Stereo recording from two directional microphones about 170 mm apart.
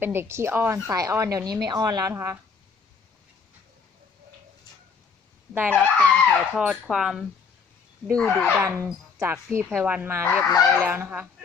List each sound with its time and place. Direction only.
0.0 s a woman's voice: 15° right (ahead or behind)
5.5 s a woman's voice: 10° right (ahead or behind)
5.8 s speech: 5° left (ahead or behind)
8.4 s a woman's voice: 15° right (ahead or behind)